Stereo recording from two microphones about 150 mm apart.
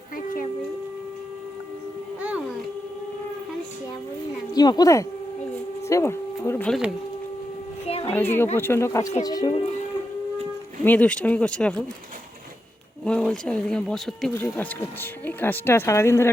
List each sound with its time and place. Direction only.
4.5 s speech: 25° left (ahead or behind)
5.9 s a sound: 20° left (ahead or behind)
6.7 s speech: centre (ahead or behind)
7.9 s a sound: 40° left (ahead or behind)
8.5 s speech: 15° left (ahead or behind); by 9.6 s 30° left (ahead or behind)
10.8 s speech: 10° left (ahead or behind)
13.1 s speech: 5° left (ahead or behind)
14.3 s speech: 15° left (ahead or behind)